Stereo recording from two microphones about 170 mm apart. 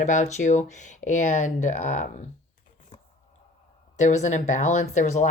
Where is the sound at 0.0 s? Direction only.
45° left (ahead or behind).